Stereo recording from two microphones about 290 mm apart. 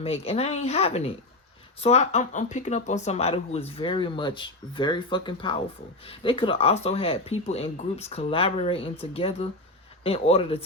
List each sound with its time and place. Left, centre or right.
0.0 s speech: left